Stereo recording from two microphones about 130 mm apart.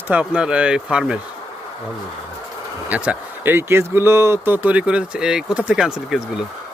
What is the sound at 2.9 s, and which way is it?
Speech, 10° right (ahead or behind).